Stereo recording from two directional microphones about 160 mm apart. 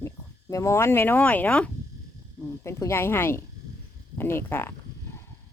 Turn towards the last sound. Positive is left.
turn(degrees=15)  # may be behind; listen again after turning